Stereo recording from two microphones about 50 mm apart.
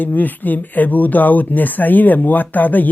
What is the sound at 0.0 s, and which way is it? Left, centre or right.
Speech, left.